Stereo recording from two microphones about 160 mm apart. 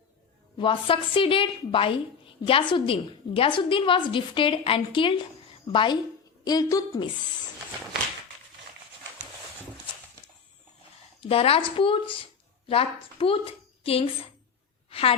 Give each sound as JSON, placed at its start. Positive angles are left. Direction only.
{"t": 0.5, "sound": "a woman's voice", "side_deg": 35}
{"t": 11.2, "sound": "a woman's voice", "side_deg": 35}
{"t": 14.8, "sound": "a sound", "side_deg": 35}